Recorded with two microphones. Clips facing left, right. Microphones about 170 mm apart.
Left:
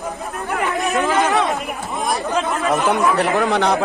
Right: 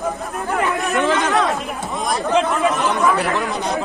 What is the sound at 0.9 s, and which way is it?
Speech, centre (ahead or behind).